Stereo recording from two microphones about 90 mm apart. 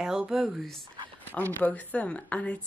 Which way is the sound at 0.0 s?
5° right (ahead or behind).